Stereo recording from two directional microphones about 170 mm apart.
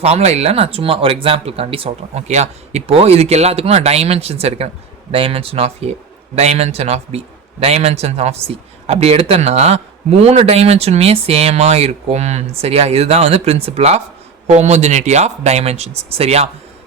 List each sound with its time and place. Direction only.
0.0 s a man's voice: 40° right (ahead or behind)